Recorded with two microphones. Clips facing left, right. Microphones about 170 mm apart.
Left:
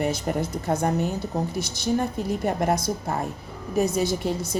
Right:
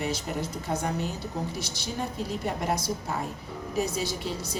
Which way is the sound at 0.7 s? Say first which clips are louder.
Left 7 dB; 50° left (ahead or behind).